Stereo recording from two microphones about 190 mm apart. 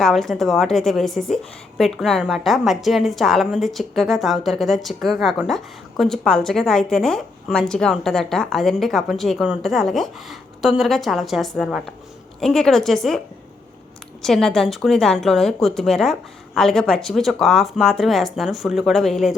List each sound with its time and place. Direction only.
0.0 s a woman's voice: centre (ahead or behind)
14.2 s a woman's voice: centre (ahead or behind)